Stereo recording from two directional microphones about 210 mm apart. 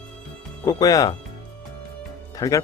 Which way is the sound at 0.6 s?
15° left (ahead or behind).